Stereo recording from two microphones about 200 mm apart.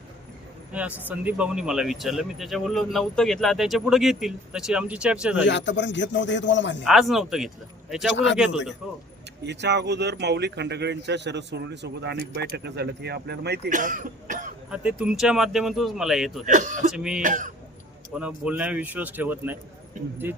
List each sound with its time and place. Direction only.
0.7 s speech: 5° right (ahead or behind)
5.5 s speech: 65° left (ahead or behind)
6.8 s speech: centre (ahead or behind)
8.1 s speech: 65° left (ahead or behind)
9.4 s speech: 60° right (ahead or behind)
13.7 s speech: 40° right (ahead or behind)
14.7 s speech: 5° right (ahead or behind)
16.5 s speech: 40° right (ahead or behind)
16.9 s speech: 5° right (ahead or behind)
17.2 s speech: 40° right (ahead or behind)
18.1 s speech: 5° right (ahead or behind)